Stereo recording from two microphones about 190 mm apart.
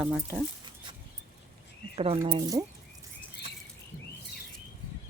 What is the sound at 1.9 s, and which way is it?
Speech, 30° right (ahead or behind).